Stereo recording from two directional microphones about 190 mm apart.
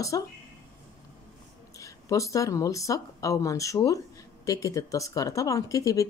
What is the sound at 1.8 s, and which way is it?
Speech, 15° left (ahead or behind).